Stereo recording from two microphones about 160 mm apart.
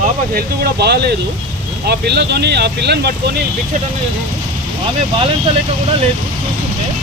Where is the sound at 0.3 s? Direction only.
85° right.